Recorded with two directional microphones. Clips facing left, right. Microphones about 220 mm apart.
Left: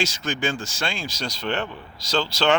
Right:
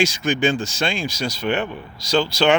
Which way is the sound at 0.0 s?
15° right (ahead or behind).